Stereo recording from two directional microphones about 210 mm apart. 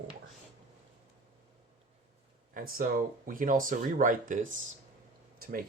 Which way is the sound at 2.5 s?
45° right (ahead or behind).